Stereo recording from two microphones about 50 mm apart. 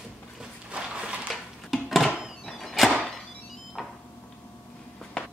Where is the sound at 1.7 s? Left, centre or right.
Centre.